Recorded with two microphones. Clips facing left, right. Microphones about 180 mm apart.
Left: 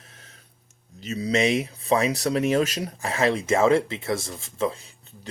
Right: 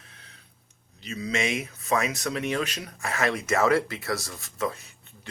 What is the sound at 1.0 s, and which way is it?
Speech, 35° left (ahead or behind).